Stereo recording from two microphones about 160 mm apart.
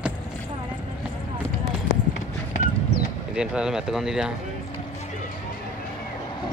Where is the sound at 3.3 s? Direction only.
5° right (ahead or behind).